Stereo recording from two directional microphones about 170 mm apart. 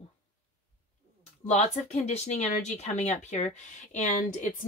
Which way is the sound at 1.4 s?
40° left (ahead or behind).